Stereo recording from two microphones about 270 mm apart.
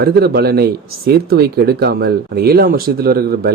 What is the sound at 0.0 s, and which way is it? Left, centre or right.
Speech, right.